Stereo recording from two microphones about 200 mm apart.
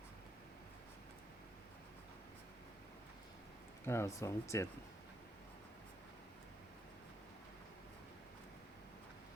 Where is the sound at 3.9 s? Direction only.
15° left (ahead or behind).